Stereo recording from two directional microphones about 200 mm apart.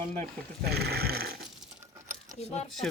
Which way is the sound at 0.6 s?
50° right (ahead or behind).